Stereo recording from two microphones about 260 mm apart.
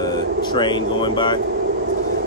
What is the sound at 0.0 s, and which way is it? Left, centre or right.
Speech, centre.